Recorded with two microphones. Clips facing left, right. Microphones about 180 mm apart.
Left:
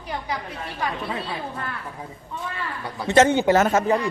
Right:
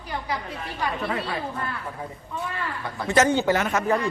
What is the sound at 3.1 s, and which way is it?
A woman's voice, 25° left (ahead or behind).